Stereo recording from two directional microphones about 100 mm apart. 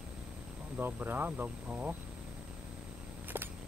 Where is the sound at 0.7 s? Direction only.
20° right (ahead or behind).